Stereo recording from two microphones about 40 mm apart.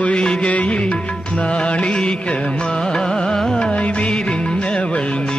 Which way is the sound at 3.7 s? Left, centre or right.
Left.